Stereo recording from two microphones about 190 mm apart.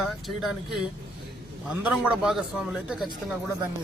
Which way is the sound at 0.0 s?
Centre (ahead or behind).